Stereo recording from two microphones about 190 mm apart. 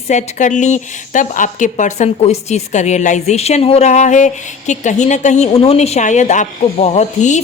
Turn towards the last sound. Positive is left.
turn(degrees=40)  # may be behind; listen again after turning